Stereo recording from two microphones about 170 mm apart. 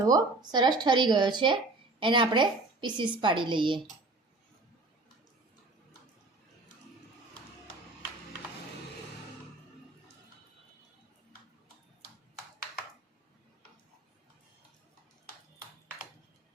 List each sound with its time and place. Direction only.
0.0 s a woman's voice: 20° right (ahead or behind)